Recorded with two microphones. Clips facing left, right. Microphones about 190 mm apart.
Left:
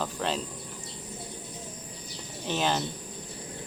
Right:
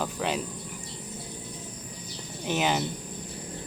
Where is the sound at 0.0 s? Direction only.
10° right (ahead or behind).